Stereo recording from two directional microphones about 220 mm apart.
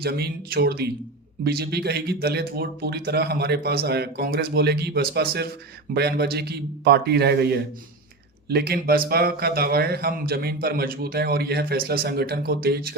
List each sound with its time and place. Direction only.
0.0 s speech: 45° right (ahead or behind)